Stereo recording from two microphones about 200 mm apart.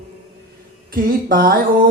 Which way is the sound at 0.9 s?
45° right (ahead or behind).